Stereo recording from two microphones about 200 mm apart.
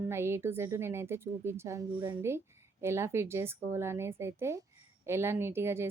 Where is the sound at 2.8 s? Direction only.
15° right (ahead or behind).